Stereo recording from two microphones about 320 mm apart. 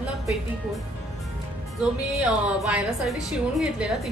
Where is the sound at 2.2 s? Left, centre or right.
Centre.